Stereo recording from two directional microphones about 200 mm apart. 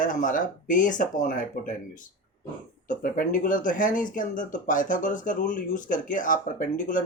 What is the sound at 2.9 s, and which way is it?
Speech, 45° left (ahead or behind).